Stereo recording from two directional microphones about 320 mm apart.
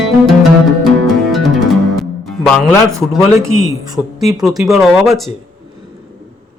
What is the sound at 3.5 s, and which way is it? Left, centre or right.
Speech, right.